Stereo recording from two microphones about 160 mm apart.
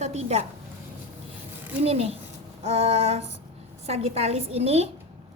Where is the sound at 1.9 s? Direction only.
40° right (ahead or behind).